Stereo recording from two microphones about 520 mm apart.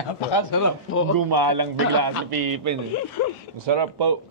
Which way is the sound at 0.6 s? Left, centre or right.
Left.